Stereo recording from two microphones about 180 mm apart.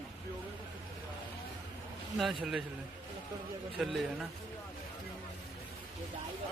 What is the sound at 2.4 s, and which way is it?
Speech, 5° right (ahead or behind).